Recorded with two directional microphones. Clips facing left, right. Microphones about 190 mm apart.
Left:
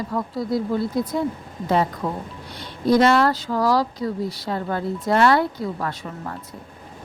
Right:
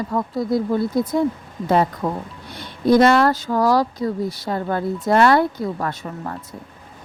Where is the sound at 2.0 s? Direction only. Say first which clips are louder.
Right 3 dB; 50° right (ahead or behind).